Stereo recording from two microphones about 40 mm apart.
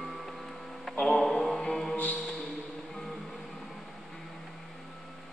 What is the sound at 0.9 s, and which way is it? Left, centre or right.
Mantra, centre.